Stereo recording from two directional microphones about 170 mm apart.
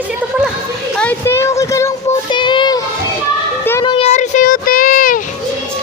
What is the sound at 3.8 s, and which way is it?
Child singing, 35° left (ahead or behind).